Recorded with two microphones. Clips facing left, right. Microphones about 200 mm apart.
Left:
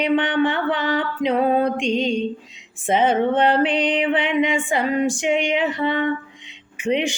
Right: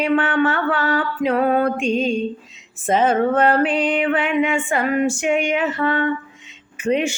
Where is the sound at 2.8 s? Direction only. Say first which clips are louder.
Right 1 dB; 15° left (ahead or behind).